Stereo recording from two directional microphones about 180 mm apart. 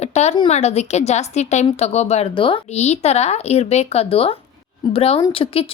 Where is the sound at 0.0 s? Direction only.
40° left (ahead or behind).